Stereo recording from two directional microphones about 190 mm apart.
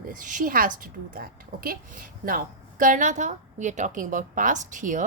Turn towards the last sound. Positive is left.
turn(degrees=-45)  # may be behind; listen again after turning